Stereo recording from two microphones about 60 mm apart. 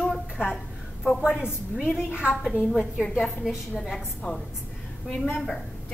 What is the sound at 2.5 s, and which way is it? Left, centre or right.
Speech, right.